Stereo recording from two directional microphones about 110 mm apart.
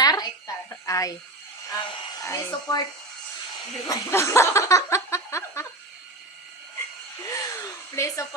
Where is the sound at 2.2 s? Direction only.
25° left (ahead or behind).